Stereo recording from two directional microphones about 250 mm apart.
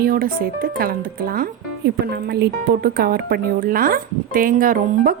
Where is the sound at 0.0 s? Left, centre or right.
Right.